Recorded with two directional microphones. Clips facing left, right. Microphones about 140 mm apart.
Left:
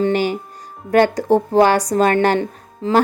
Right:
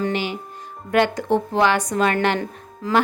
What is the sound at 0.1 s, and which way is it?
Music, 45° left (ahead or behind).